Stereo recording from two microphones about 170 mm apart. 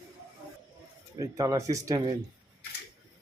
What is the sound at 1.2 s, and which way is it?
Speech, 20° right (ahead or behind).